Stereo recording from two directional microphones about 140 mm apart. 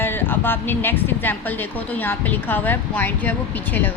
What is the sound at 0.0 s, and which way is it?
A woman's voice, 15° left (ahead or behind).